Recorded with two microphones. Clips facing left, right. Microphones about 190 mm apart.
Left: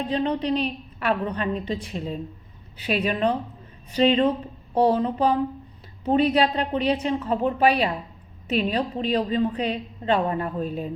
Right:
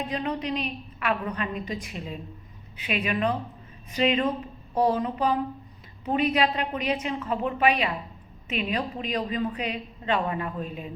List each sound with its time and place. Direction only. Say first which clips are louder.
0.1 s a woman's voice: left 5 dB; 30° left (ahead or behind)